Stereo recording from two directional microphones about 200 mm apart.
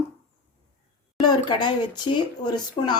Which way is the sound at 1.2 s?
20° left (ahead or behind).